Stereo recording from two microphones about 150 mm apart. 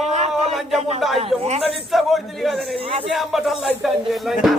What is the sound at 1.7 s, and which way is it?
Speech, centre (ahead or behind).